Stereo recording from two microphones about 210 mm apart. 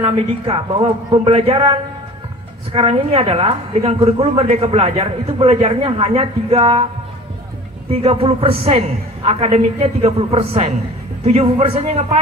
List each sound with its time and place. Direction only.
0.0 s a woman's voice: 25° right (ahead or behind)
7.9 s a woman's voice: 30° right (ahead or behind)